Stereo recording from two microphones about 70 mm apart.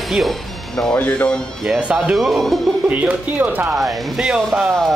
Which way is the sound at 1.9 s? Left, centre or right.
Centre.